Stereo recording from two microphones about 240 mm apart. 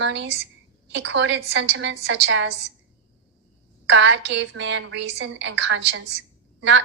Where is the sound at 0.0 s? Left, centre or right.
Right.